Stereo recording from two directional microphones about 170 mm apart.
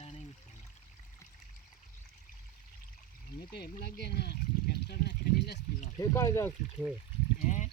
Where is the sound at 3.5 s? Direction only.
70° left (ahead or behind).